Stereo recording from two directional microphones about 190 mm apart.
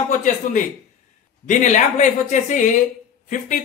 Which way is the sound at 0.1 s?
45° left (ahead or behind).